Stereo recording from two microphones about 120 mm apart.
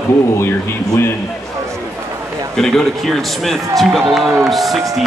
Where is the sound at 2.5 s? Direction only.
5° left (ahead or behind).